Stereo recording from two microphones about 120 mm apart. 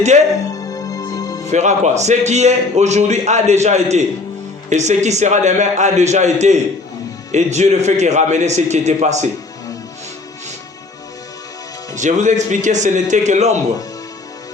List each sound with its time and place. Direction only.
0.4 s music: 30° left (ahead or behind)
1.5 s a man's voice: 75° right (ahead or behind)
11.9 s a man's voice: 90° right; by 13.6 s 75° right (ahead or behind)